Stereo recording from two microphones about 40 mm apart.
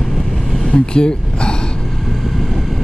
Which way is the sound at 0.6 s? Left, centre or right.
Left.